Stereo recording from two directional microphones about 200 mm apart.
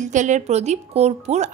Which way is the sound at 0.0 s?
40° right (ahead or behind).